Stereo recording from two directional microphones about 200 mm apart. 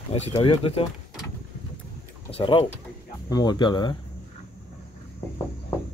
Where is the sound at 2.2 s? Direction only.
30° left (ahead or behind).